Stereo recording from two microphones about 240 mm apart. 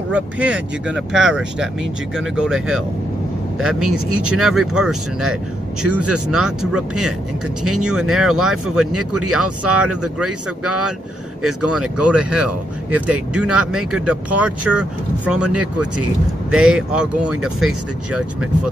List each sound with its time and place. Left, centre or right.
0.1 s speech: centre
9.2 s speech: right
9.7 s speech: centre